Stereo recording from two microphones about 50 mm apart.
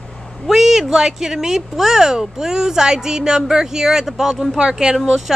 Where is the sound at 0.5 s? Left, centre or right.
Centre.